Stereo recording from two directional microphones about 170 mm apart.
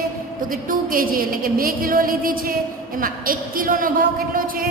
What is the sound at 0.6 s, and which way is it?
A woman's voice, 55° right (ahead or behind).